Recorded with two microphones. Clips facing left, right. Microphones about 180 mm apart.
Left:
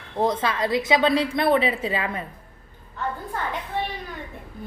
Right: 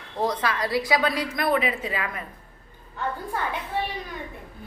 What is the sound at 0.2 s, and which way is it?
A woman's voice, 25° left (ahead or behind).